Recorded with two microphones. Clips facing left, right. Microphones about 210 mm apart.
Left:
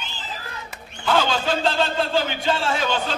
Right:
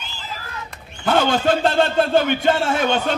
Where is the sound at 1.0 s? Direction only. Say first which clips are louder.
Right 4 dB; 55° right (ahead or behind).